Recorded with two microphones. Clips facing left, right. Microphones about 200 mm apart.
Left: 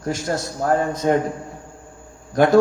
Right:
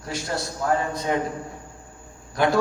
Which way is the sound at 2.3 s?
45° left (ahead or behind).